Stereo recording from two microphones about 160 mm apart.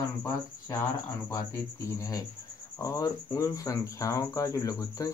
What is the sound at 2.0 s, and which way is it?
Speech, 20° left (ahead or behind).